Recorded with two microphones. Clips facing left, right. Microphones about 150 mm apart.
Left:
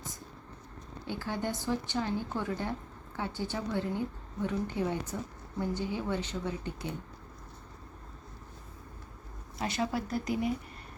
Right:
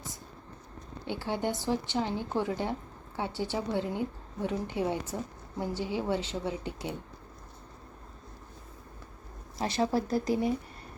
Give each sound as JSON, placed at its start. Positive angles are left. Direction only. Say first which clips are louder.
{"t": 1.0, "sound": "a woman's voice", "louder": "right 3 dB", "side_deg": -20}
{"t": 9.6, "sound": "speech", "louder": "right 4 dB", "side_deg": -35}